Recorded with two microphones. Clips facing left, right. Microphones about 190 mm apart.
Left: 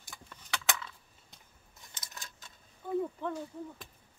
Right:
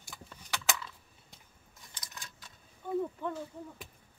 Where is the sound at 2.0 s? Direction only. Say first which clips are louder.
Even; 25° left (ahead or behind).